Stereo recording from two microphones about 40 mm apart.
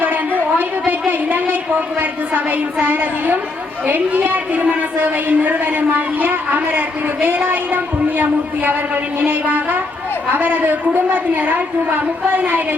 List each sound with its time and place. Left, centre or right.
2.0 s speech: right
3.8 s a woman's voice: right
11.1 s a woman's voice: right